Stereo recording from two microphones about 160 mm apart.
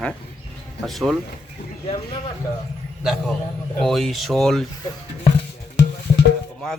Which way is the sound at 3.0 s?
Centre (ahead or behind).